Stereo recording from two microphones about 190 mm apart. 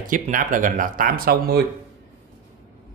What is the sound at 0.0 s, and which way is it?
Speech, 45° right (ahead or behind).